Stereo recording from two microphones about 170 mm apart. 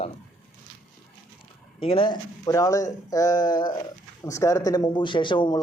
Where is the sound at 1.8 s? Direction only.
30° left (ahead or behind).